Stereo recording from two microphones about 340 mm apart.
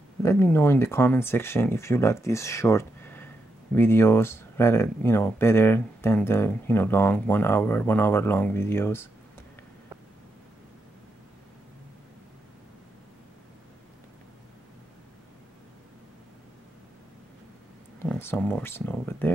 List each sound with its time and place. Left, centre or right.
0.2 s speech: centre
17.9 s speech: centre